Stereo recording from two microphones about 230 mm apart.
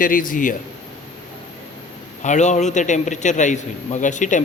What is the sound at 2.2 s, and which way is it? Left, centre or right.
A man's voice, left.